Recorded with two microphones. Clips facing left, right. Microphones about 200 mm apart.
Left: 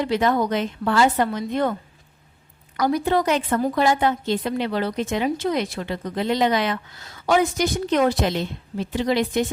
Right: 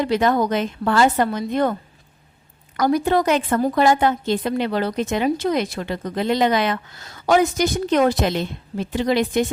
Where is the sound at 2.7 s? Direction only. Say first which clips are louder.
Right 2 dB; 50° right (ahead or behind).